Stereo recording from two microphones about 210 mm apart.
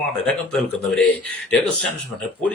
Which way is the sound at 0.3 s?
Centre (ahead or behind).